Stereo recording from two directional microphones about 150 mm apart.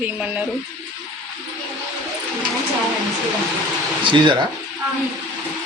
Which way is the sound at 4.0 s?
35° right (ahead or behind).